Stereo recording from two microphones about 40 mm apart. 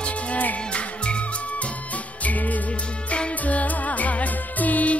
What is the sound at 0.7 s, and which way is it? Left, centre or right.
Music, left.